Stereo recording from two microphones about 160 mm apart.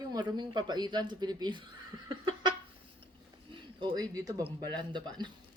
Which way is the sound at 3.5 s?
30° right (ahead or behind).